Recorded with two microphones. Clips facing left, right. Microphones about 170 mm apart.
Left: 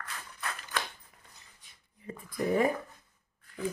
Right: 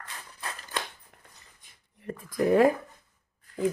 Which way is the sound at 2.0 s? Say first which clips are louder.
Right 6 dB; 80° right.